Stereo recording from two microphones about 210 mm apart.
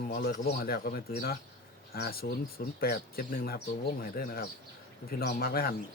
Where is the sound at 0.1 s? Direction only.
45° left (ahead or behind).